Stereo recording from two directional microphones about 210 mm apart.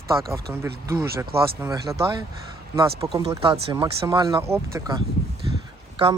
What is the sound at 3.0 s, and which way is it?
Speech, 20° right (ahead or behind).